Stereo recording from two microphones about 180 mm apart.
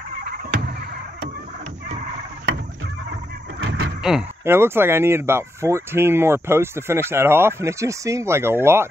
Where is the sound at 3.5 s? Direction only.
80° right.